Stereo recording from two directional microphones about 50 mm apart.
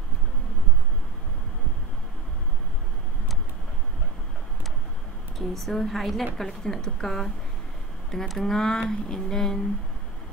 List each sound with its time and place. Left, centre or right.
5.4 s a woman's voice: centre
8.4 s speech: centre